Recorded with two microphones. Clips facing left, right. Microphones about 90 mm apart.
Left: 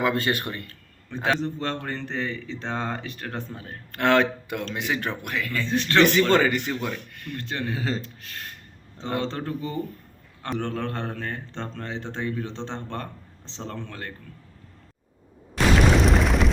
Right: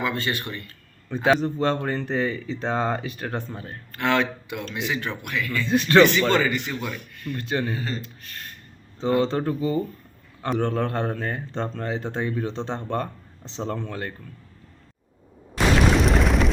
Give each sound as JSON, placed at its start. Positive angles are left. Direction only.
{"t": 0.0, "sound": "speech", "side_deg": 50}
{"t": 0.7, "sound": "speech", "side_deg": -5}
{"t": 3.9, "sound": "speech", "side_deg": 50}
{"t": 5.6, "sound": "speech", "side_deg": -10}
{"t": 6.3, "sound": "speech", "side_deg": 45}
{"t": 7.1, "sound": "speech", "side_deg": 60}
{"t": 7.3, "sound": "speech", "side_deg": -10}
{"t": 7.7, "sound": "speech", "side_deg": 90}
{"t": 9.2, "sound": "speech", "side_deg": -15}
{"t": 15.5, "sound": "boom", "side_deg": 0}